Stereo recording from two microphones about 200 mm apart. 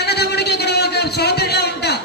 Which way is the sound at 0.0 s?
55° left (ahead or behind).